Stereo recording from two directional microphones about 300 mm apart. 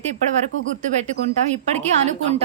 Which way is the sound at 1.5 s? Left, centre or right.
Right.